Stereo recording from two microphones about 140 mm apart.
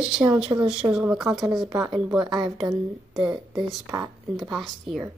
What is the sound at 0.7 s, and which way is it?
A woman's voice, 5° right (ahead or behind).